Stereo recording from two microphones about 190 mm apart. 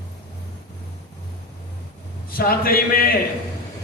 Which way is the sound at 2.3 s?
50° left (ahead or behind).